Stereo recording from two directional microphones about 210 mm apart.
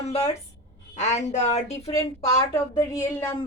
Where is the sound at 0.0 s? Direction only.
30° left (ahead or behind).